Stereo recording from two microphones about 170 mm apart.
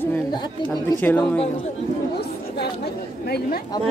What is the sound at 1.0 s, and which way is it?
Speech, 10° left (ahead or behind).